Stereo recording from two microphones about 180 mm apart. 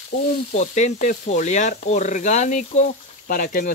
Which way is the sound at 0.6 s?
40° left (ahead or behind).